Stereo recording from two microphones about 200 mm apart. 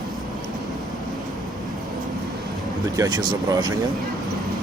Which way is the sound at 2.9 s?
20° right (ahead or behind).